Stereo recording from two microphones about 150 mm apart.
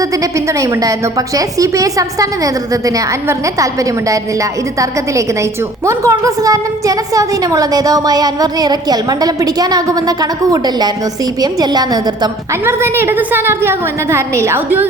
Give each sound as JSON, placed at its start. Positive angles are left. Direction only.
{"t": 0.0, "sound": "a woman's voice", "side_deg": -25}
{"t": 12.6, "sound": "a woman's voice", "side_deg": -15}